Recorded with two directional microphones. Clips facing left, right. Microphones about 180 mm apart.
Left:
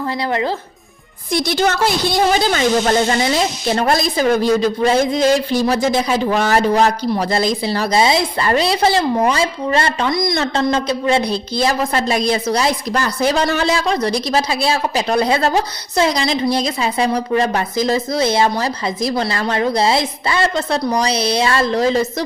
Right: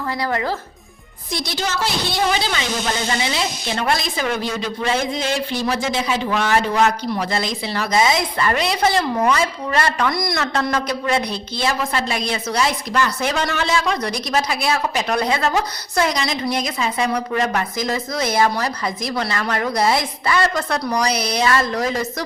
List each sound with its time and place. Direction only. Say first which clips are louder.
0.3 s speech: left 4 dB; 25° left (ahead or behind)
1.3 s a woman's voice: left 8 dB; 50° left (ahead or behind); by 22.0 s 30° left (ahead or behind)